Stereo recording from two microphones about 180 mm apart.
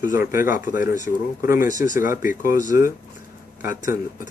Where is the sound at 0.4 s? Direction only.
50° left (ahead or behind).